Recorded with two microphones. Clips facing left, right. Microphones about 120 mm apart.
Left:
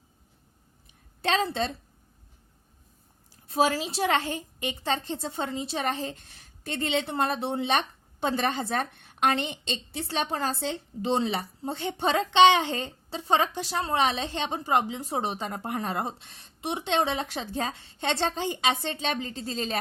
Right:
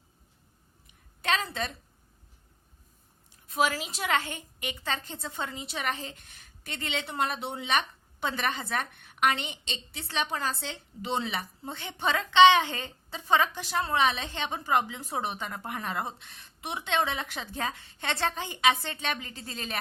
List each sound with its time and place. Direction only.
1.2 s a woman's voice: 30° left (ahead or behind)
3.4 s a woman's voice: 30° left (ahead or behind)